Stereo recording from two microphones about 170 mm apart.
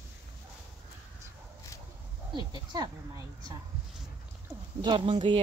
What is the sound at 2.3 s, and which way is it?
Speech, 25° right (ahead or behind).